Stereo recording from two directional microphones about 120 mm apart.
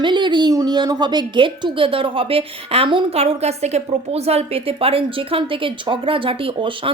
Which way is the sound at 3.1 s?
60° right (ahead or behind).